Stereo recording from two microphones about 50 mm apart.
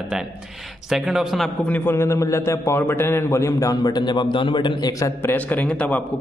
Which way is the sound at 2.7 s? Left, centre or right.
Left.